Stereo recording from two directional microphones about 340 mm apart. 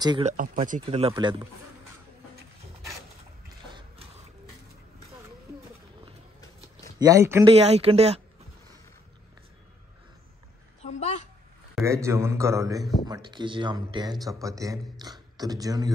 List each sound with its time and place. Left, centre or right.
0.0 s a man's voice: centre
7.0 s a man's voice: centre
10.8 s a woman's voice: centre
11.7 s a man's voice: centre